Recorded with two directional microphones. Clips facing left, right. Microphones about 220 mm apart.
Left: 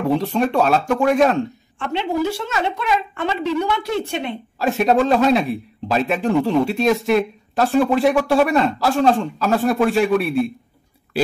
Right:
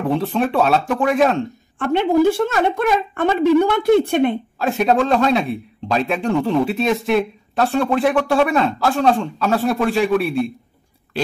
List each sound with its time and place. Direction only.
0.0 s a man's voice: centre (ahead or behind)
1.8 s a woman's voice: 50° right (ahead or behind)
4.6 s a man's voice: centre (ahead or behind)